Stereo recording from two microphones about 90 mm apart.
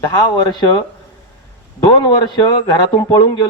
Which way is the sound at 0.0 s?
45° left (ahead or behind).